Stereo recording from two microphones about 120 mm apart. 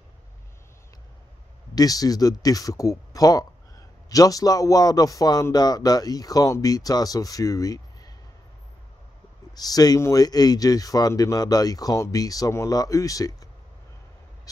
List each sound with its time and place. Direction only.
1.8 s a man's voice: 30° left (ahead or behind)
9.6 s a man's voice: 35° left (ahead or behind)